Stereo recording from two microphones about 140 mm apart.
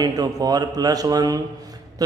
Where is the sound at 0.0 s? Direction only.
25° right (ahead or behind).